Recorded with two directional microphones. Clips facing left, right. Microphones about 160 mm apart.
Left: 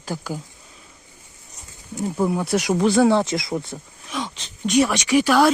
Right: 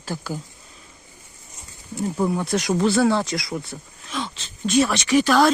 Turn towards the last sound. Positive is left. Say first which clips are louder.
# even
turn(degrees=10)  # may be behind; listen again after turning